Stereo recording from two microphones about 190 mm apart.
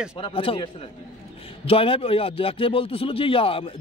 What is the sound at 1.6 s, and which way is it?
Speech, 30° left (ahead or behind).